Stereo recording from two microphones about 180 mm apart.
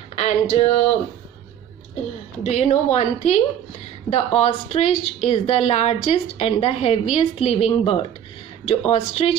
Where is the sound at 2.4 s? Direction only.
40° left (ahead or behind).